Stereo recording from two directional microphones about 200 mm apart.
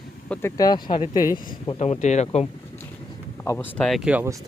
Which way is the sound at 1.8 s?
35° left (ahead or behind).